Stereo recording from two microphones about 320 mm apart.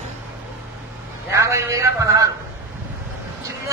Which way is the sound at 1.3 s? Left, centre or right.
Centre.